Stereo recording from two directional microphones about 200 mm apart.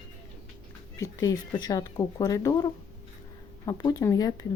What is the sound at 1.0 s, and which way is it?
Speech, 15° left (ahead or behind).